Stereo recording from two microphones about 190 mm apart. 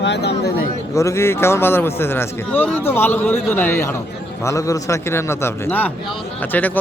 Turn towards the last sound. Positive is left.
turn(degrees=10)  # may be behind; listen again after turning